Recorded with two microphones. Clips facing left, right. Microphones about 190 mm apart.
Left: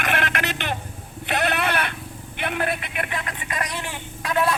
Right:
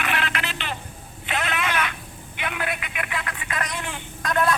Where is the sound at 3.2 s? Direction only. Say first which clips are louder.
Left 1 dB; 15° left (ahead or behind).